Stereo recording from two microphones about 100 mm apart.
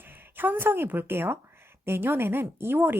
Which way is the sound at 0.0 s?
20° right (ahead or behind).